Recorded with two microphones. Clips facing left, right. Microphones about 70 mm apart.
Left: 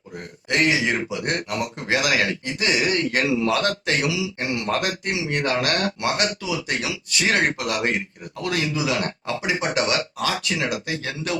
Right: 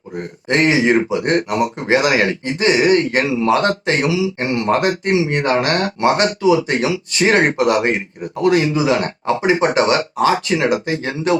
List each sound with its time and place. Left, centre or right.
0.2 s speech: right